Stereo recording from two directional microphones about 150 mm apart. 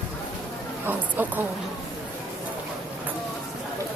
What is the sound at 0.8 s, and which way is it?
Speech, 10° right (ahead or behind).